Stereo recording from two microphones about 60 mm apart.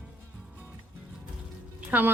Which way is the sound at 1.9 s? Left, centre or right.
Right.